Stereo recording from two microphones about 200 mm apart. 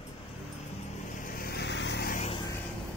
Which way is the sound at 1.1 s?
45° left (ahead or behind).